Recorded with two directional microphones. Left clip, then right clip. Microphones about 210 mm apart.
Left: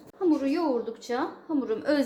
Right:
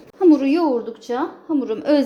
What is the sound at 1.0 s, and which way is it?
Speech, 15° right (ahead or behind).